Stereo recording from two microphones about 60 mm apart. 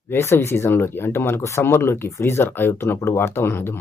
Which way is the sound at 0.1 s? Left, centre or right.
Left.